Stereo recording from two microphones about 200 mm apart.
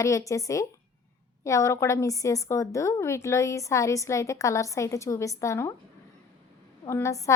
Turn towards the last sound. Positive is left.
turn(degrees=15)  # may be behind; listen again after turning